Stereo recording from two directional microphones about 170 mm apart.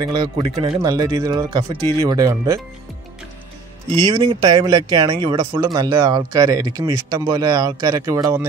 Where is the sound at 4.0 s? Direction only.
25° right (ahead or behind).